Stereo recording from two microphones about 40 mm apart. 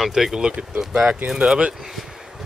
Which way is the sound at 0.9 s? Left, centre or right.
Centre.